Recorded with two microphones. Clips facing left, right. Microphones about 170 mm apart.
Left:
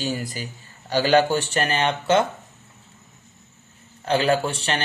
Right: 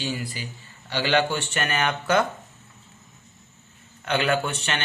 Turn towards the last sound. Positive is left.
turn(degrees=35)  # may be behind; listen again after turning